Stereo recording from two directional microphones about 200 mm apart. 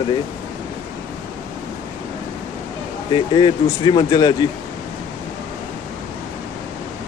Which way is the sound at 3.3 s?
25° left (ahead or behind).